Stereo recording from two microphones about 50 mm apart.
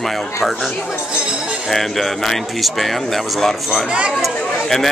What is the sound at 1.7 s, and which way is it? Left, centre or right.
Speech, centre.